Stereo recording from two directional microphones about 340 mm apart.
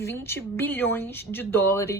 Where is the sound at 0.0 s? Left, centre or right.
Centre.